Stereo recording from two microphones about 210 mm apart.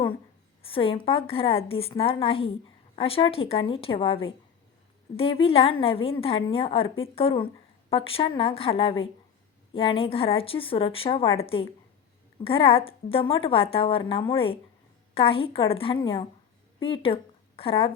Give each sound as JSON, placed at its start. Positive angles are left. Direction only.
{"t": 0.6, "sound": "a woman's voice", "side_deg": 25}